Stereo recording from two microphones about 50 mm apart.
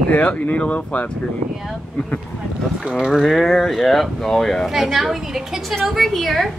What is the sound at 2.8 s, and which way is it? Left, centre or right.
Speech, centre.